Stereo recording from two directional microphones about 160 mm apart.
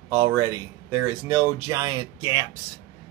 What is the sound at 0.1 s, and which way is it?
Speech, 15° right (ahead or behind).